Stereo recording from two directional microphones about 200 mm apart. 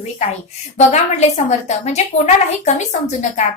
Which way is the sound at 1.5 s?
35° left (ahead or behind).